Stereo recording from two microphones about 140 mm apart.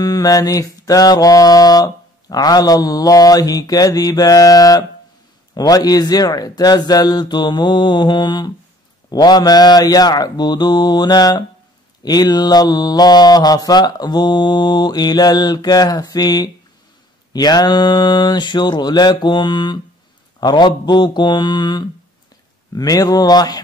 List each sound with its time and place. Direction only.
0.0 s mantra: 25° left (ahead or behind)